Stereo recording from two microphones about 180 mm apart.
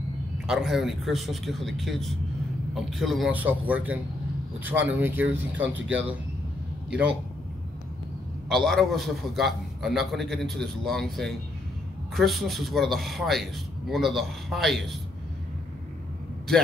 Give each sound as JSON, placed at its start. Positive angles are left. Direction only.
{"t": 0.5, "sound": "a man's voice", "side_deg": 0}
{"t": 5.6, "sound": "speech", "side_deg": -90}
{"t": 8.5, "sound": "a man's voice", "side_deg": 0}